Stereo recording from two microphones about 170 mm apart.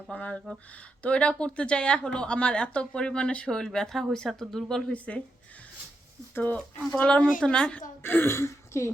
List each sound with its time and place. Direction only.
0.1 s speech: 5° left (ahead or behind)
6.3 s speech: 10° left (ahead or behind)